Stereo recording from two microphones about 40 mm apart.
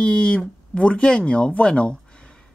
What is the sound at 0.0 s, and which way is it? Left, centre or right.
Speech, left.